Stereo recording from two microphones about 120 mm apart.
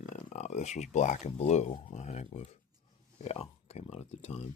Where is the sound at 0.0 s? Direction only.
90° left; by 4.4 s 55° left (ahead or behind).